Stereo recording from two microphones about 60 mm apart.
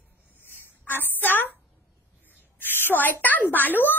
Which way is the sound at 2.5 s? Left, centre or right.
Left.